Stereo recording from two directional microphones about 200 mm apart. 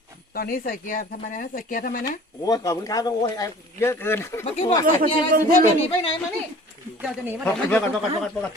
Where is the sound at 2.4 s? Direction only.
20° left (ahead or behind).